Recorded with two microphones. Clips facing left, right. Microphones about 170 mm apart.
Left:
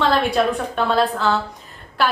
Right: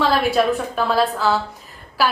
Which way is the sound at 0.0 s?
Centre (ahead or behind).